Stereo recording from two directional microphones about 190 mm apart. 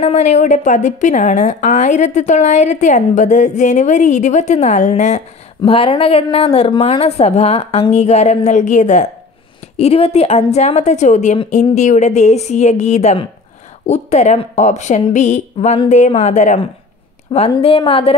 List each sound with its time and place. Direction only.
0.0 s a woman's voice: 35° left (ahead or behind)